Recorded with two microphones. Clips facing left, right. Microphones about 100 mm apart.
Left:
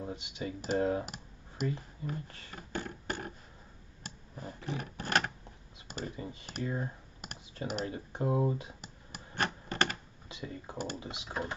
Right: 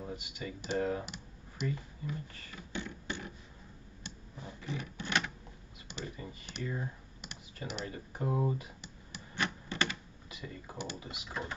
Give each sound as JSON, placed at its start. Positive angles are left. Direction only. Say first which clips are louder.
{"t": 0.0, "sound": "speech", "louder": "left 3 dB", "side_deg": 25}
{"t": 1.0, "sound": "a sound", "louder": "left 1 dB", "side_deg": 40}
{"t": 5.9, "sound": "computer keyboard", "louder": "left 3 dB", "side_deg": 40}
{"t": 6.4, "sound": "speech", "louder": "left 2 dB", "side_deg": 40}
{"t": 7.9, "sound": "speech", "louder": "left 2 dB", "side_deg": 25}
{"t": 8.8, "sound": "typewriter", "louder": "left 1 dB", "side_deg": 45}
{"t": 10.2, "sound": "speech", "louder": "left 4 dB", "side_deg": 25}